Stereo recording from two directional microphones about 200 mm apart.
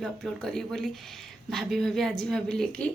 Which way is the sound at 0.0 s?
Centre (ahead or behind).